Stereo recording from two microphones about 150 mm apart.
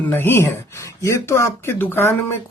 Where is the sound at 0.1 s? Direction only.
15° left (ahead or behind).